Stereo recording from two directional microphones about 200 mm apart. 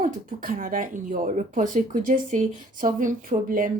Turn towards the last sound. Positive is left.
turn(degrees=-40)  # may be behind; listen again after turning